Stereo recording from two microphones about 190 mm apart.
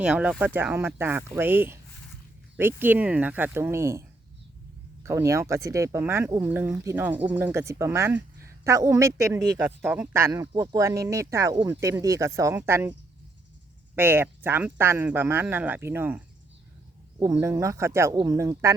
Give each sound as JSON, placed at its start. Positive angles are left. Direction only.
{"t": 0.0, "sound": "speech", "side_deg": -5}
{"t": 5.0, "sound": "speech", "side_deg": -15}
{"t": 13.9, "sound": "speech", "side_deg": -10}
{"t": 17.3, "sound": "speech", "side_deg": -15}